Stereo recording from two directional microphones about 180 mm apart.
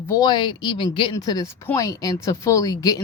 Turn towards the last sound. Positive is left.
turn(degrees=20)  # may be behind; listen again after turning